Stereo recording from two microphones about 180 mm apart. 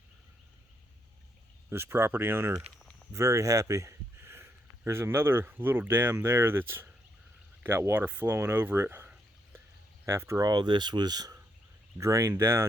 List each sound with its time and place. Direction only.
1.7 s speech: 15° right (ahead or behind)